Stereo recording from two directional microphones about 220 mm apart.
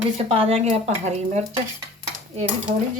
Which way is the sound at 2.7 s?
35° right (ahead or behind).